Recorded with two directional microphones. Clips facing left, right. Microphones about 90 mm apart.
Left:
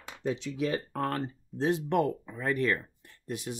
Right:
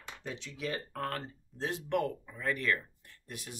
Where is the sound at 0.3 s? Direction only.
20° left (ahead or behind).